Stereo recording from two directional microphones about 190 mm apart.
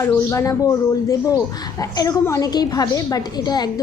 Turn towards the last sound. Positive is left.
turn(degrees=20)  # may be behind; listen again after turning